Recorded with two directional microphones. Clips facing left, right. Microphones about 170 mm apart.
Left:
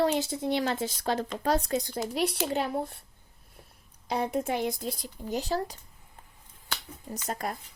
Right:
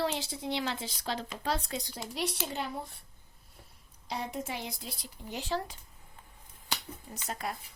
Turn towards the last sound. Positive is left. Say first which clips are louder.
# left 4 dB
turn(degrees=45)  # may be behind; listen again after turning